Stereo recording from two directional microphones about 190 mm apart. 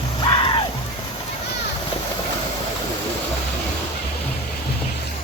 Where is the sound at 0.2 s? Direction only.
30° left (ahead or behind).